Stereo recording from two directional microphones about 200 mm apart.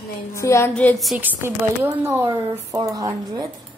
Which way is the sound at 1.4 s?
10° right (ahead or behind).